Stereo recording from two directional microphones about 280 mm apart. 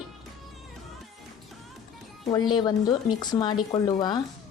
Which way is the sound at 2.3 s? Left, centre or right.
Centre.